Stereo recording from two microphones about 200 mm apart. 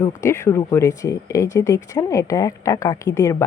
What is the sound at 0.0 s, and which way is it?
Speech, 15° left (ahead or behind).